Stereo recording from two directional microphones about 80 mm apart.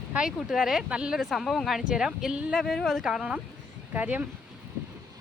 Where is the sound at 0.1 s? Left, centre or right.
Centre.